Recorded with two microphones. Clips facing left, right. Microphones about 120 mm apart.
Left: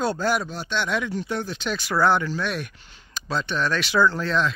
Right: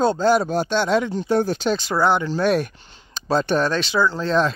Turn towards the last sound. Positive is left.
turn(degrees=-35)  # may be behind; listen again after turning